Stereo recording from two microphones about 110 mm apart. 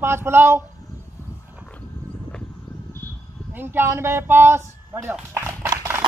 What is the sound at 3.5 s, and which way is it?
Speech, 20° right (ahead or behind).